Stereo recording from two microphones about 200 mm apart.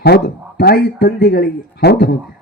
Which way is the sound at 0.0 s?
55° left (ahead or behind).